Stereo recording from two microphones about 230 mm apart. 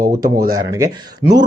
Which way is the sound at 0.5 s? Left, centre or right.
Centre.